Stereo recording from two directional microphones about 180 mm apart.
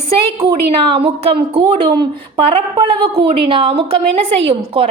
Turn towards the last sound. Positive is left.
turn(degrees=-30)  # may be behind; listen again after turning